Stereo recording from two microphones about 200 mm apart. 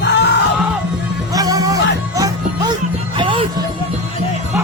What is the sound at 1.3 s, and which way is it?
Music, 20° right (ahead or behind).